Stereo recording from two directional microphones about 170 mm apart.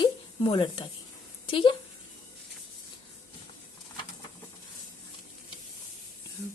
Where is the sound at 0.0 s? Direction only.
30° left (ahead or behind).